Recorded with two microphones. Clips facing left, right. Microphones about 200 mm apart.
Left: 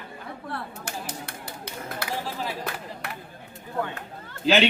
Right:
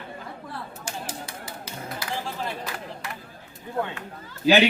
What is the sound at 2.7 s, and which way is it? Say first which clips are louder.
Chop: right 1 dB; 60° left (ahead or behind).